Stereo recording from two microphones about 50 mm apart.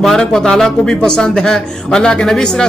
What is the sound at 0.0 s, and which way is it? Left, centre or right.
Speech, centre.